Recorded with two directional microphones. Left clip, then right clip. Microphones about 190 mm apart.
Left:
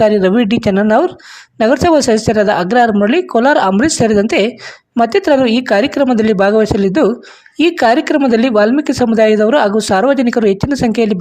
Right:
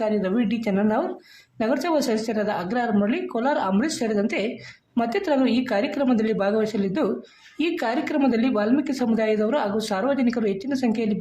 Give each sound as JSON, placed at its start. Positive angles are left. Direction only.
{"t": 0.0, "sound": "speech", "side_deg": 45}